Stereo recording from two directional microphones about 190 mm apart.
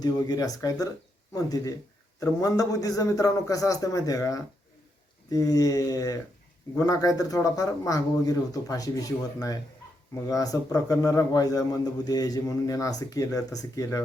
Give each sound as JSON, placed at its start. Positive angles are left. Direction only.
{"t": 0.0, "sound": "a man's voice", "side_deg": 20}